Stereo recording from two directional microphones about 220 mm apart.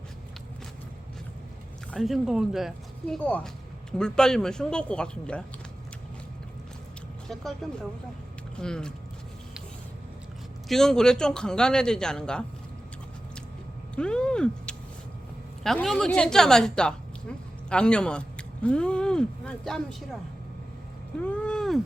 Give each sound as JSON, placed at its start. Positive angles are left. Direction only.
{"t": 1.9, "sound": "a man's voice", "side_deg": 0}
{"t": 7.3, "sound": "speech", "side_deg": 0}
{"t": 10.7, "sound": "a man's voice", "side_deg": 0}
{"t": 13.9, "sound": "a woman's voice", "side_deg": 5}
{"t": 21.2, "sound": "a sound", "side_deg": 5}